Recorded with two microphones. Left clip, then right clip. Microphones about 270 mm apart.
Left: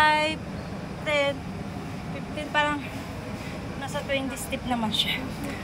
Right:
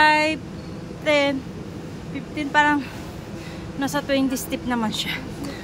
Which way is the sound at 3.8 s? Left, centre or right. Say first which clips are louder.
Right 7 dB; right.